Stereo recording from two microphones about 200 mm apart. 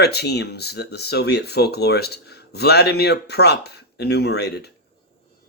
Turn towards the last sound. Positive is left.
turn(degrees=55)  # may be behind; listen again after turning